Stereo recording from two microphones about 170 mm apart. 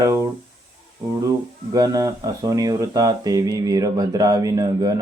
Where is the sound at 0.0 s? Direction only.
20° right (ahead or behind).